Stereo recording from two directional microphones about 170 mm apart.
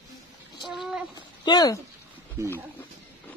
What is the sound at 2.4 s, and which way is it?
Speech, 15° right (ahead or behind).